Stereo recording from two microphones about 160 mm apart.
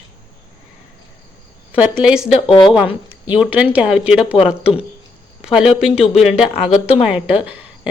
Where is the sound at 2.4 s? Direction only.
35° left (ahead or behind).